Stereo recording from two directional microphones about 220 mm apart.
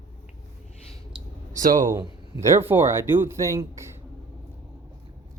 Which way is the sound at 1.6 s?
35° right (ahead or behind).